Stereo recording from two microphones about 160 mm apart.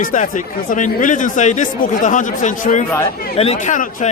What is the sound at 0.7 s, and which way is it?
A man's voice, 50° left (ahead or behind).